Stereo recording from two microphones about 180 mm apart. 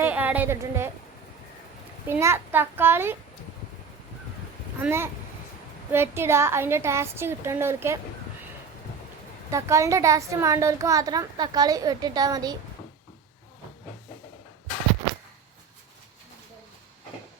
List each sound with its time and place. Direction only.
0.0 s a woman's voice: 10° right (ahead or behind)
2.0 s a woman's voice: 15° right (ahead or behind)
4.8 s a woman's voice: 15° right (ahead or behind)
9.5 s a woman's voice: 15° right (ahead or behind)